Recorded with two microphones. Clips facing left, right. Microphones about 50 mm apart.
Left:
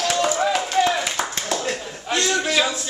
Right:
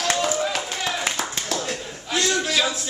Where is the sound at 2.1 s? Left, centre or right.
Centre.